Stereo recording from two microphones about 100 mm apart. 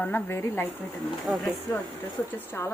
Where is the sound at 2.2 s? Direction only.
20° left (ahead or behind).